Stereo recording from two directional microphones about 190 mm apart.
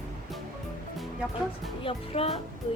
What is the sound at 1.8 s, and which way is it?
Speech, 30° left (ahead or behind).